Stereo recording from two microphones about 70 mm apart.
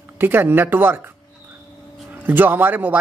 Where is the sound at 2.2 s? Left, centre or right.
Right.